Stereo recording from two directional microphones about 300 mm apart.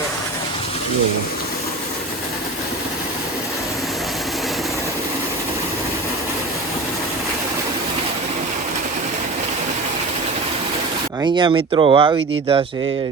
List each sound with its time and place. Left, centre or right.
11.2 s speech: centre